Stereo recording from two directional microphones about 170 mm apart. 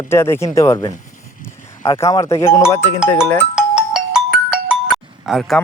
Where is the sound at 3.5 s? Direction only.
5° right (ahead or behind).